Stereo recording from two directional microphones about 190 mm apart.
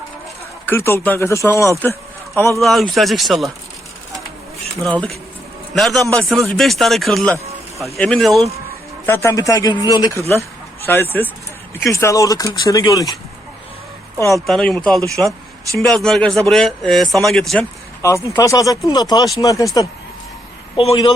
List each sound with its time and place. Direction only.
0.6 s speech: 15° left (ahead or behind)
1.8 s a sound: 10° left (ahead or behind)
2.6 s speech: centre (ahead or behind)
4.8 s speech: 5° left (ahead or behind)
9.0 s speech: 15° left (ahead or behind)
14.4 s speech: centre (ahead or behind)
18.0 s speech: 15° left (ahead or behind)